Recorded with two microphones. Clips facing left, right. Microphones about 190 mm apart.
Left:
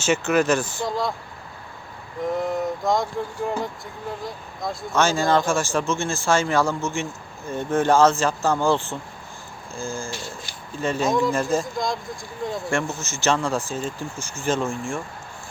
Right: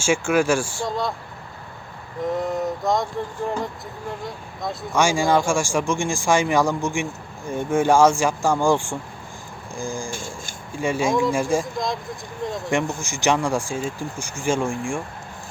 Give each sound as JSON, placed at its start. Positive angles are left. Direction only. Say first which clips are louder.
{"t": 0.0, "sound": "speech", "louder": "right 1 dB", "side_deg": -10}
{"t": 0.9, "sound": "speech", "louder": "left 1 dB", "side_deg": 0}
{"t": 2.3, "sound": "speech", "louder": "even", "side_deg": 0}
{"t": 4.9, "sound": "speech", "louder": "right 1 dB", "side_deg": -10}
{"t": 10.1, "sound": "a sound", "louder": "right 1 dB", "side_deg": -50}
{"t": 10.8, "sound": "speech", "louder": "right 1 dB", "side_deg": -10}
{"t": 11.6, "sound": "speech", "louder": "even", "side_deg": 0}
{"t": 12.7, "sound": "speech", "louder": "right 2 dB", "side_deg": -15}